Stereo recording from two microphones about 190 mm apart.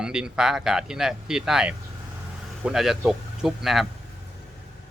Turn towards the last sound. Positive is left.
turn(degrees=0)  # may be behind; listen again after turning